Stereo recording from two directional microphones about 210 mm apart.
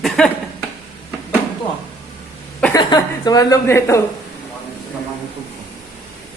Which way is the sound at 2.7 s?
20° left (ahead or behind).